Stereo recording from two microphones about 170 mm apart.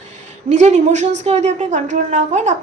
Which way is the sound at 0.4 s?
45° right (ahead or behind).